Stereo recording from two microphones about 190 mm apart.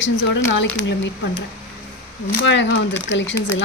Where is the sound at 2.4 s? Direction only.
70° left (ahead or behind).